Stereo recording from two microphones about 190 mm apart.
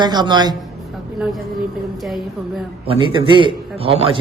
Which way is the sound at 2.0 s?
Centre (ahead or behind).